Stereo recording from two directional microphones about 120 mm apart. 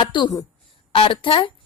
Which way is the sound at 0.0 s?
40° left (ahead or behind).